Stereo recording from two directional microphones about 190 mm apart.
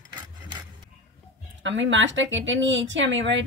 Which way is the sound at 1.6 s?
75° right (ahead or behind).